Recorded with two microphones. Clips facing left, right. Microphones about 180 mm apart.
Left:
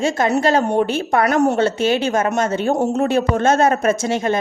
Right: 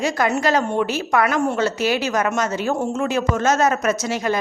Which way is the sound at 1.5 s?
25° left (ahead or behind).